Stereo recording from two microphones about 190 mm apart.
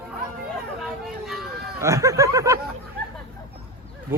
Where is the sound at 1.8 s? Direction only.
15° right (ahead or behind).